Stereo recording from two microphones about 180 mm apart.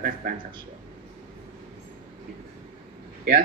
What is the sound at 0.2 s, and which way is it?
Speech, 60° right (ahead or behind).